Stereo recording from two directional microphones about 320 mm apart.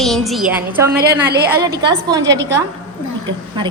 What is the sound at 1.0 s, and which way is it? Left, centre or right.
Speech, right.